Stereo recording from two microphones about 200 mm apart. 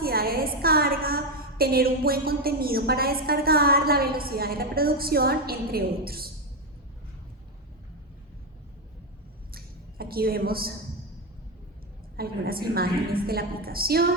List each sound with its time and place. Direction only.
0.0 s a woman's voice: 50° right (ahead or behind)
9.5 s a sound: 50° right (ahead or behind)
12.1 s a woman's voice: 50° right (ahead or behind)